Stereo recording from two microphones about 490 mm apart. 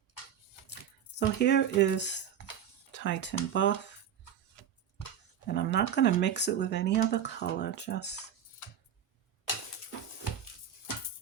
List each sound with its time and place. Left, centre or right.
1.2 s speech: left
5.5 s speech: left